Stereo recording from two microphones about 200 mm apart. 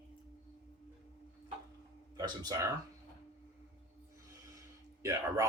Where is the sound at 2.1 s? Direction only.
20° right (ahead or behind).